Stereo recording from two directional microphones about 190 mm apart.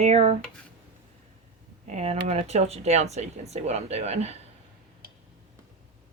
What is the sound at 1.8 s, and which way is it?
Speech, 35° right (ahead or behind).